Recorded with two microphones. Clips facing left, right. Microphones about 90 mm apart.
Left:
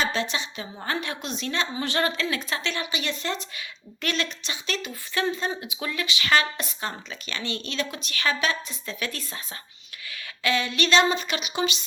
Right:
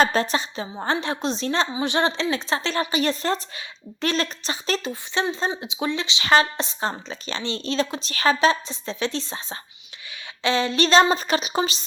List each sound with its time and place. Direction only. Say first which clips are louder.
0.0 s a woman's voice: right 7 dB; 45° right (ahead or behind)
1.7 s a woman's voice: right 4 dB; 20° right (ahead or behind); by 4.9 s 35° right (ahead or behind)
5.1 s a woman's voice: right 2 dB; 25° right (ahead or behind)